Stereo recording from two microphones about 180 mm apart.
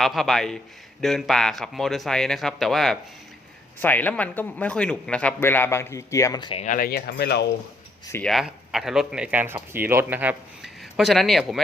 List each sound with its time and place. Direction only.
0.0 s a man's voice: centre (ahead or behind); by 6.7 s 30° left (ahead or behind)
6.7 s speech: 55° left (ahead or behind)
8.1 s speech: 5° left (ahead or behind)